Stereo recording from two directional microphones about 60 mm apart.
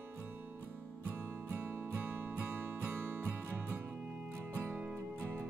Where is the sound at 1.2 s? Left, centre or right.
Right.